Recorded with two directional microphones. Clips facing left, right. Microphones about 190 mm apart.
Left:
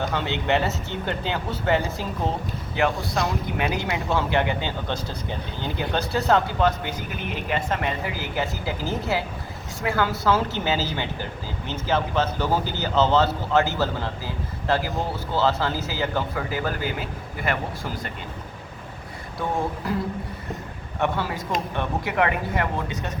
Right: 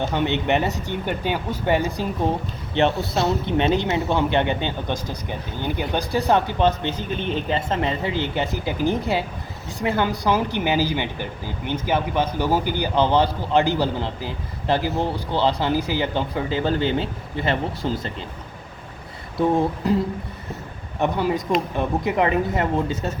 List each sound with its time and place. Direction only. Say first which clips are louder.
0.0 s a man's voice: right 4 dB; 20° right (ahead or behind)
3.2 s a man's voice: right 6 dB; 25° right (ahead or behind)
19.4 s a man's voice: right 7 dB; 20° right (ahead or behind)
21.0 s a man's voice: right 4 dB; 20° right (ahead or behind)